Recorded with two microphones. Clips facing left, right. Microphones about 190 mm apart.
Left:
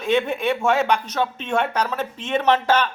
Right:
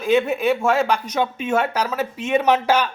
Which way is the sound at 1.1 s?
10° right (ahead or behind).